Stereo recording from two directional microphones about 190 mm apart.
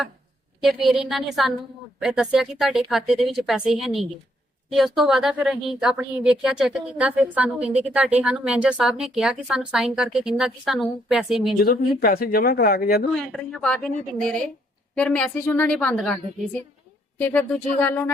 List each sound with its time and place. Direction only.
0.6 s speech: centre (ahead or behind)
11.6 s speech: 55° left (ahead or behind)
13.1 s a woman's voice: 5° left (ahead or behind)
17.2 s a woman's voice: 10° left (ahead or behind)